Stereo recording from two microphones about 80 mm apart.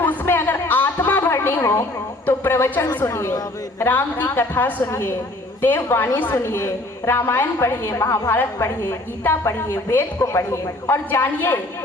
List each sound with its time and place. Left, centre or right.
0.0 s music: left
1.3 s a woman's voice: left